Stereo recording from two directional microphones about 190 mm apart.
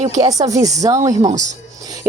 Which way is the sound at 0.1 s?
20° right (ahead or behind).